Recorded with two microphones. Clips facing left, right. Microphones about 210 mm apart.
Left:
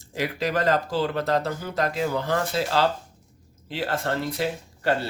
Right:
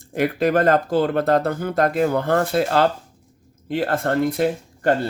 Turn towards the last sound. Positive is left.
turn(degrees=-50)  # may be behind; listen again after turning